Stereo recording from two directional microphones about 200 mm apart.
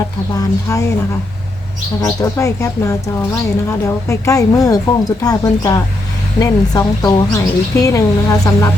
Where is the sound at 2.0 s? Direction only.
15° left (ahead or behind).